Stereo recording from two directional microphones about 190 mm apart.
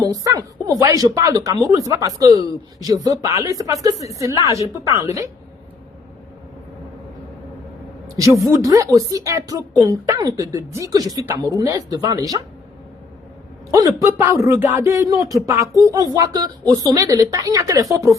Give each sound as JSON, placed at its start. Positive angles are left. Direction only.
{"t": 0.0, "sound": "speech", "side_deg": -20}
{"t": 8.2, "sound": "a woman's voice", "side_deg": -15}
{"t": 13.7, "sound": "speech", "side_deg": -15}